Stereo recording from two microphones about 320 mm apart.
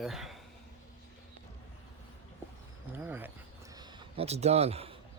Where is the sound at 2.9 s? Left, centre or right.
Centre.